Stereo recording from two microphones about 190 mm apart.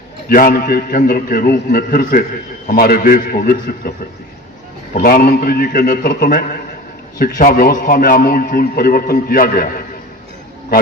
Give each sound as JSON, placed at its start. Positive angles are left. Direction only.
{"t": 0.3, "sound": "a man's voice", "side_deg": 50}
{"t": 4.9, "sound": "a man's voice", "side_deg": 50}